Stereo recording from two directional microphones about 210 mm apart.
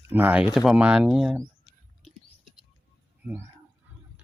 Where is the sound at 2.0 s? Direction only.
5° right (ahead or behind).